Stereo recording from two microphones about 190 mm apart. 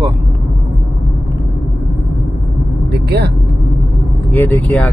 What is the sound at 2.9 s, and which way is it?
Speech, 55° right (ahead or behind).